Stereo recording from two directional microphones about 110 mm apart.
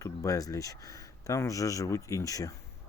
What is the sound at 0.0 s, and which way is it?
Speech, 30° left (ahead or behind).